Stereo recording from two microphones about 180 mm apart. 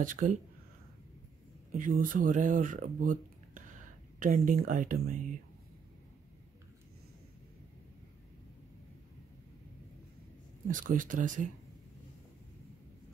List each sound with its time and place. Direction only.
0.0 s speech: 50° right (ahead or behind)
1.7 s speech: 50° right (ahead or behind)
10.7 s speech: 45° right (ahead or behind)